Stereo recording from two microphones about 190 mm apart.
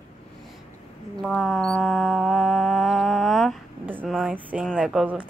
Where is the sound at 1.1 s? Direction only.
Centre (ahead or behind).